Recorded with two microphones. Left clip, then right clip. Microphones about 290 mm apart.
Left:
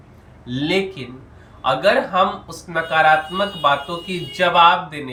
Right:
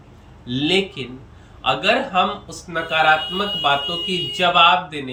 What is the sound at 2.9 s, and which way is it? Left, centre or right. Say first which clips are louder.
Speech: left 1 dB; centre.